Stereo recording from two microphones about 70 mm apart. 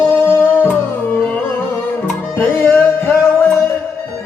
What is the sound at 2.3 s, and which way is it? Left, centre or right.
Music, left.